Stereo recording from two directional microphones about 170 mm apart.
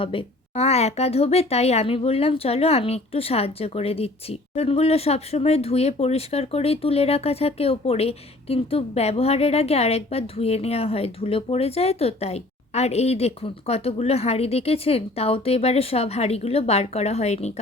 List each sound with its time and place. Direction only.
0.0 s speech: 30° left (ahead or behind)